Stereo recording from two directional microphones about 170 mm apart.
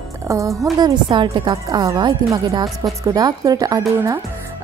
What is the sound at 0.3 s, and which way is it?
A woman's voice, 20° right (ahead or behind).